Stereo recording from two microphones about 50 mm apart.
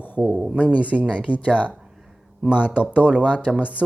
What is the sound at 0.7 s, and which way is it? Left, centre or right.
Speech, right.